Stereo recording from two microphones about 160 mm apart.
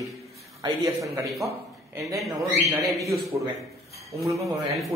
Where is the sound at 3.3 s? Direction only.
20° right (ahead or behind).